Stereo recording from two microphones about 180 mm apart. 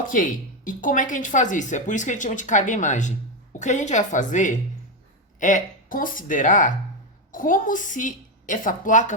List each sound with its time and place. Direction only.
0.0 s a woman's voice: 45° left (ahead or behind)